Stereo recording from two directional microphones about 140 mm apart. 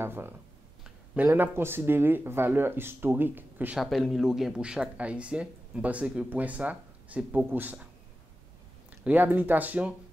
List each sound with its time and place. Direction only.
0.0 s speech: 15° right (ahead or behind)
3.8 s speech: centre (ahead or behind)
9.0 s speech: 10° right (ahead or behind)